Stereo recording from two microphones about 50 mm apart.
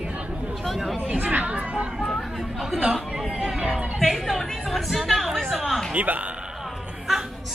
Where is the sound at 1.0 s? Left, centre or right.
Right.